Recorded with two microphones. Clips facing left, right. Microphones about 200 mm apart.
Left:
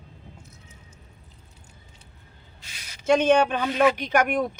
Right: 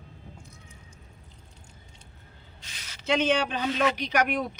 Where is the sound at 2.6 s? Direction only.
10° left (ahead or behind).